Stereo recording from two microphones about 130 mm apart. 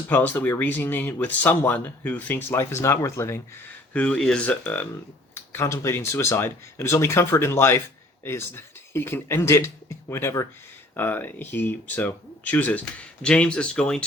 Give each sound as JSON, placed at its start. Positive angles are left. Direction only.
{"t": 0.1, "sound": "speech", "side_deg": 15}
{"t": 3.9, "sound": "speech", "side_deg": 10}